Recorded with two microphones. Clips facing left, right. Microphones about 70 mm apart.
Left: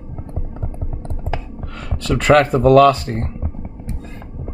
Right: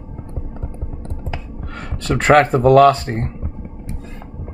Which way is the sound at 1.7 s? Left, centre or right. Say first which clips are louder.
Even; right.